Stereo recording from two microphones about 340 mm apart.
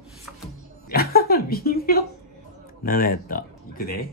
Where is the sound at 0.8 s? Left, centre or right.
Left.